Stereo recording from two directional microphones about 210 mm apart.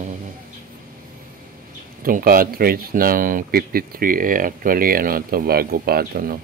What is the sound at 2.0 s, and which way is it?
Speech, 40° right (ahead or behind).